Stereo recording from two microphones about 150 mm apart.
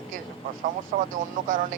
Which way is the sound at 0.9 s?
50° right (ahead or behind).